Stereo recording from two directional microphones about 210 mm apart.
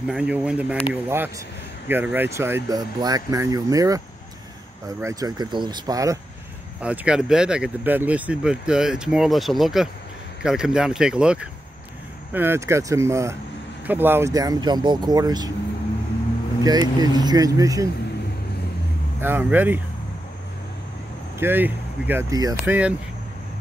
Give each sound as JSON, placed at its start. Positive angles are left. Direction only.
{"t": 0.0, "sound": "speech", "side_deg": -5}
{"t": 5.0, "sound": "speech", "side_deg": -20}
{"t": 6.8, "sound": "speech", "side_deg": -5}
{"t": 16.6, "sound": "speech", "side_deg": -20}
{"t": 19.2, "sound": "speech", "side_deg": -10}
{"t": 21.4, "sound": "speech", "side_deg": -10}